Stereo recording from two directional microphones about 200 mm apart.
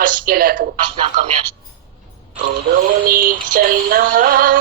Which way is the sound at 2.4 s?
45° right (ahead or behind).